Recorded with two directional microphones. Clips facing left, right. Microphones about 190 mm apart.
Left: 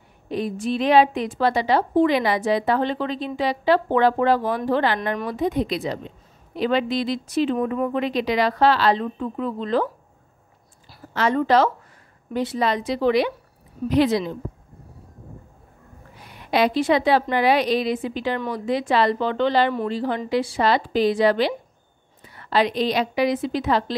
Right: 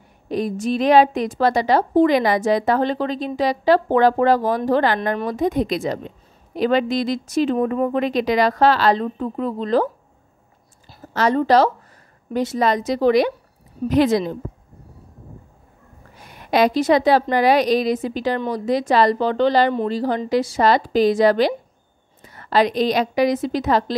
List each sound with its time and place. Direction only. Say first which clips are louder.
0.3 s a woman's voice: right 3 dB; 40° right (ahead or behind)
11.1 s a woman's voice: right 3 dB; 35° right (ahead or behind)
16.2 s a woman's voice: right 3 dB; 45° right (ahead or behind)